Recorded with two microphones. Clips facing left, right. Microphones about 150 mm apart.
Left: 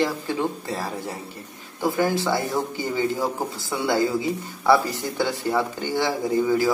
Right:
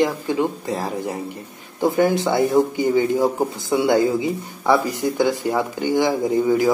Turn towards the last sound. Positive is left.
turn(degrees=-15)  # may be behind; listen again after turning